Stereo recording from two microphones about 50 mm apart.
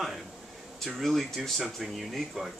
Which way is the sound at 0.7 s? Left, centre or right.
Centre.